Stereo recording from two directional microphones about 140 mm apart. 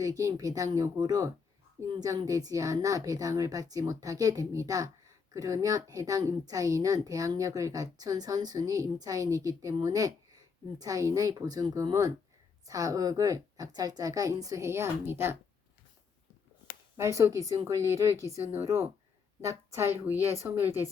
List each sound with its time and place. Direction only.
0.0 s a woman's voice: 25° right (ahead or behind)
17.0 s a woman's voice: 20° right (ahead or behind)